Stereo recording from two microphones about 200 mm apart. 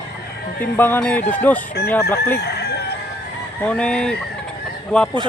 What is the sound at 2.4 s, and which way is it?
Crowing, 55° left (ahead or behind).